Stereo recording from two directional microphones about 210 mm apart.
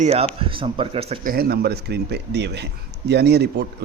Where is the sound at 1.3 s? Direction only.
45° right (ahead or behind).